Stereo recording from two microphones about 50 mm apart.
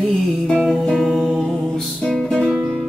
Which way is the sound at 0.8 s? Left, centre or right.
Centre.